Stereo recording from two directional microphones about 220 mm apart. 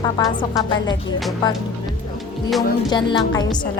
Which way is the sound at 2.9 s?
20° left (ahead or behind).